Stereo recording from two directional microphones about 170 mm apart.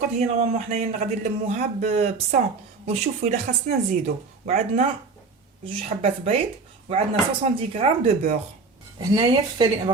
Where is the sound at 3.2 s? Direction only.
45° right (ahead or behind).